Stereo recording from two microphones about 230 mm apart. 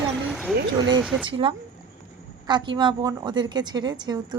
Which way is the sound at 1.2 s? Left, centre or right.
Right.